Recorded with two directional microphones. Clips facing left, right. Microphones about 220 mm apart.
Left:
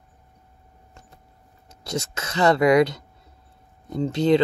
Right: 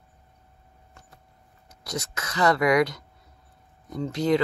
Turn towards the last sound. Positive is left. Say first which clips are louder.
# left 4 dB
turn(degrees=25)  # may be behind; listen again after turning